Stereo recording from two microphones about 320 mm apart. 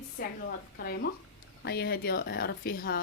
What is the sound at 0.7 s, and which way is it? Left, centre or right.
A woman's voice, left.